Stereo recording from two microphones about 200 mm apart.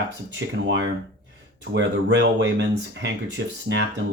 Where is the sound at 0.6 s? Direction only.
60° right (ahead or behind).